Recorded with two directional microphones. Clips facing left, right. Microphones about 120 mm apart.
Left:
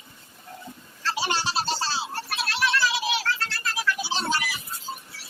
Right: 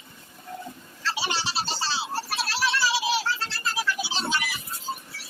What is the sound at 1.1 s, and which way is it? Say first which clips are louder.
Music: left 4 dB; 45° left (ahead or behind).